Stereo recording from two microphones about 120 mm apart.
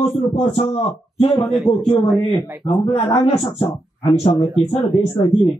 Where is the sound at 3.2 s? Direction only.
55° left (ahead or behind).